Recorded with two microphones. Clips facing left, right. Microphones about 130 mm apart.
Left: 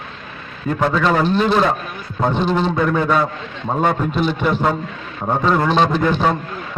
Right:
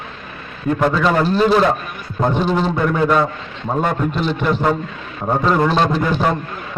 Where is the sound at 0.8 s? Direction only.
5° right (ahead or behind).